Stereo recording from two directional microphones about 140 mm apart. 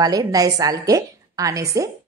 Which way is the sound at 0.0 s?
25° right (ahead or behind).